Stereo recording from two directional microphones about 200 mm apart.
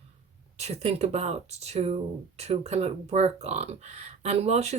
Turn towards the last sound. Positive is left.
turn(degrees=-35)  # may be behind; listen again after turning